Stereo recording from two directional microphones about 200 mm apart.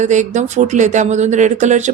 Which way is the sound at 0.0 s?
35° right (ahead or behind).